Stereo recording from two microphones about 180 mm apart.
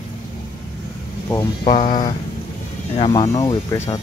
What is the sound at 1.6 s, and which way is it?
Speech, 40° left (ahead or behind).